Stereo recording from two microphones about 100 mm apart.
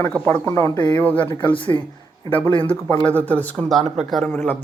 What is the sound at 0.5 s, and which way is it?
Speech, 30° left (ahead or behind).